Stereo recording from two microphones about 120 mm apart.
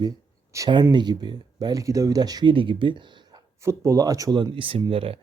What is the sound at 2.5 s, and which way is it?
Speech, 45° right (ahead or behind).